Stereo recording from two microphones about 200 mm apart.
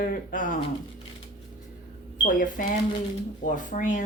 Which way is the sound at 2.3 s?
45° left (ahead or behind).